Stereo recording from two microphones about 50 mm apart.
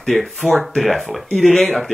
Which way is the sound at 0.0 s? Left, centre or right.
Centre.